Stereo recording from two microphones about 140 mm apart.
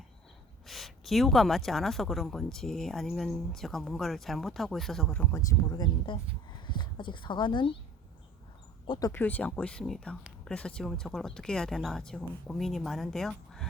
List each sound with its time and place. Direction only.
0.7 s speech: centre (ahead or behind)
5.3 s speech: 25° left (ahead or behind)
8.9 s speech: 25° left (ahead or behind)
9.1 s speech: 10° left (ahead or behind)